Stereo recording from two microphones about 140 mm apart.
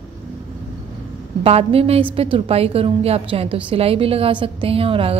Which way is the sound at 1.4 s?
45° right (ahead or behind).